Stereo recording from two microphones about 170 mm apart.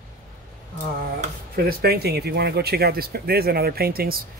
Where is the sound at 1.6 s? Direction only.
65° right (ahead or behind).